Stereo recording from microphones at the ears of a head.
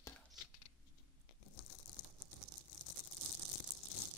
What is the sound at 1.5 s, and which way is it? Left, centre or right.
Tearing, left.